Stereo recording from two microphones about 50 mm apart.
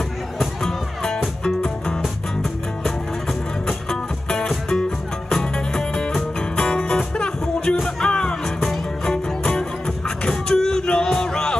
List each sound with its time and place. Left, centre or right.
0.4 s music: centre
3.6 s music: centre